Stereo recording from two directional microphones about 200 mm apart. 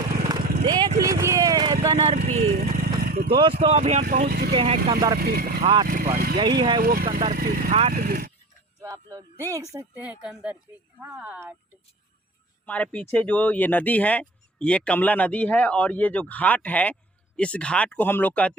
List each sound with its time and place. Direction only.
0.3 s vehicle: 20° right (ahead or behind)
2.2 s speech: 35° right (ahead or behind)
2.6 s vehicle: 50° right (ahead or behind)
3.3 s speech: 25° right (ahead or behind)
4.3 s speech: 50° right (ahead or behind)
4.5 s speech: 30° right (ahead or behind)
5.2 s speech: 50° right (ahead or behind)
5.6 s speech: 25° right (ahead or behind)
6.8 s speech: 45° right (ahead or behind)
7.7 s speech: 35° right (ahead or behind)
7.9 s speech: 50° right (ahead or behind)
8.8 s a sound: 15° right (ahead or behind)
9.7 s speech: 5° right (ahead or behind)
12.6 s speech: 5° left (ahead or behind)